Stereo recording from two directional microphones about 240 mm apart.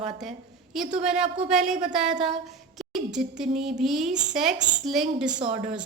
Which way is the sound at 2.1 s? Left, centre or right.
Right.